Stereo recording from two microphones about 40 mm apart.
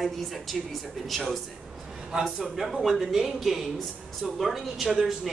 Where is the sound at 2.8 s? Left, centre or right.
Centre.